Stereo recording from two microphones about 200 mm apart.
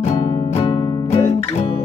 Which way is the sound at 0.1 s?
35° left (ahead or behind).